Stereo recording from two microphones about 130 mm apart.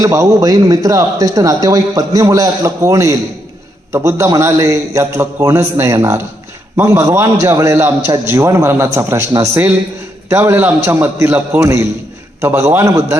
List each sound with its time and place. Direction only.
0.0 s a man's voice: 25° right (ahead or behind)